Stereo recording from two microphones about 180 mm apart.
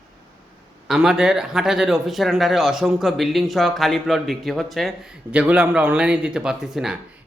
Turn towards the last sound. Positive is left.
turn(degrees=0)  # may be behind; listen again after turning